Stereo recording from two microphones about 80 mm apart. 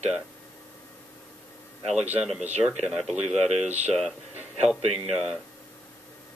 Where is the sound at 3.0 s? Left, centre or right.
Centre.